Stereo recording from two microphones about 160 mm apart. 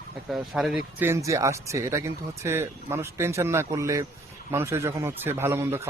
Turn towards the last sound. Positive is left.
turn(degrees=-15)  # may be behind; listen again after turning